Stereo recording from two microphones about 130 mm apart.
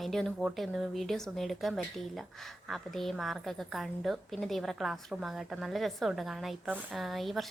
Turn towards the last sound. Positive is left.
turn(degrees=0)  # may be behind; listen again after turning